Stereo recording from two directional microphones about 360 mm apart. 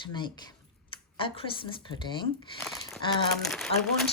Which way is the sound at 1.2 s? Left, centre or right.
Centre.